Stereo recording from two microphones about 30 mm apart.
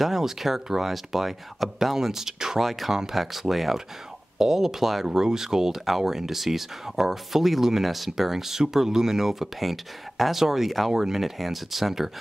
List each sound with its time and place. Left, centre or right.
0.0 s speech: centre
2.6 s speech: centre
2.9 s speech: centre
3.2 s speech: centre
5.0 s speech: centre